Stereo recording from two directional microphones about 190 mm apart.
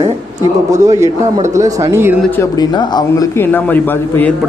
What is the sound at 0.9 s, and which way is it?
Speech, 15° right (ahead or behind).